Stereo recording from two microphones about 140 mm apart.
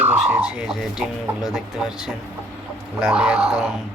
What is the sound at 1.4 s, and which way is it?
Speech, 5° right (ahead or behind).